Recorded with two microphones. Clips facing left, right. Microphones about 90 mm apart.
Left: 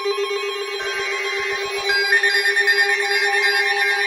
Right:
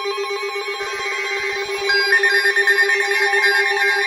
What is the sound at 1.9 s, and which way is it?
Ringtone, 20° right (ahead or behind).